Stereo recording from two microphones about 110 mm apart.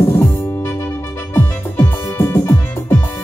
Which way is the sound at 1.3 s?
20° left (ahead or behind).